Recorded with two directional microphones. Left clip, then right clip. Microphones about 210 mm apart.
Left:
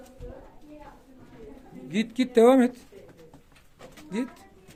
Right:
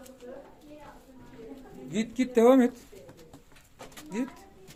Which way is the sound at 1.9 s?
25° left (ahead or behind).